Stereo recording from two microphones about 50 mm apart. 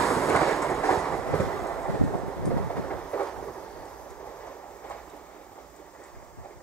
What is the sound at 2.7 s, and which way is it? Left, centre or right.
Thunder, left.